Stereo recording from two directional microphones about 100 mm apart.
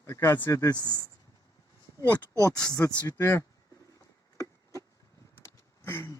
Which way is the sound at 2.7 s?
25° left (ahead or behind).